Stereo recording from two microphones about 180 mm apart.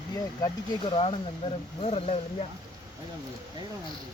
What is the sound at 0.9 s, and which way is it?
Speech, 30° left (ahead or behind).